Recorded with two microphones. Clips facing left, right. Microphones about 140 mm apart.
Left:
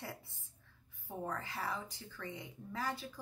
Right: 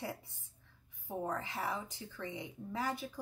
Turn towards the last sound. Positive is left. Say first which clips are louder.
# right 3 dB
turn(degrees=-20)  # may be behind; listen again after turning